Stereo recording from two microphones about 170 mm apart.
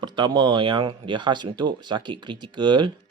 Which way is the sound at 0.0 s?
25° right (ahead or behind).